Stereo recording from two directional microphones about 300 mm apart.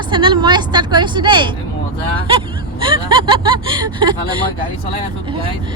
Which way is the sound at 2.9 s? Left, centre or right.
Centre.